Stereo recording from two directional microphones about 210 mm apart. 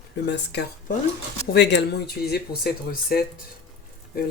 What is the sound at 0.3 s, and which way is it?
Speech, 55° left (ahead or behind).